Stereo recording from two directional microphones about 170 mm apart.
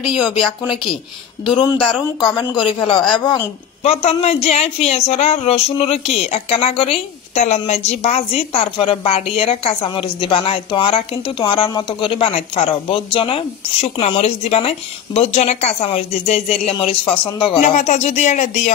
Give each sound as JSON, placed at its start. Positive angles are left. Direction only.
{"t": 0.1, "sound": "speech", "side_deg": -5}
{"t": 1.4, "sound": "speech", "side_deg": 25}
{"t": 3.8, "sound": "speech", "side_deg": 40}